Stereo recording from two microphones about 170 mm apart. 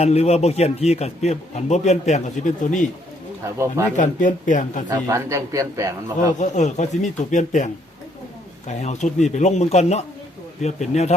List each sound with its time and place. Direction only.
0.0 s speech: 40° left (ahead or behind)
3.9 s speech: 45° left (ahead or behind)
4.9 s a man's voice: 20° right (ahead or behind)
6.4 s speech: 45° left (ahead or behind)